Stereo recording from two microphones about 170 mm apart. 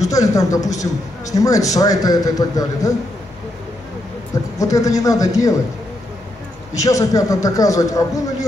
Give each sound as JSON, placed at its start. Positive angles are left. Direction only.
{"t": 0.0, "sound": "a man's voice", "side_deg": 20}
{"t": 4.6, "sound": "a man's voice", "side_deg": 20}
{"t": 6.8, "sound": "a man's voice", "side_deg": 20}